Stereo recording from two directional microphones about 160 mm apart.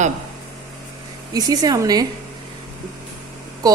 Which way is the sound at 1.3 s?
25° right (ahead or behind).